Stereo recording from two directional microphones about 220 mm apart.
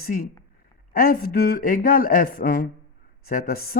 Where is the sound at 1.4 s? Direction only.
40° left (ahead or behind).